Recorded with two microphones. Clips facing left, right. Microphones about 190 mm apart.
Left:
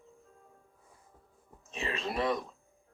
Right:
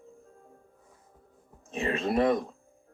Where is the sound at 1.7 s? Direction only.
50° right (ahead or behind).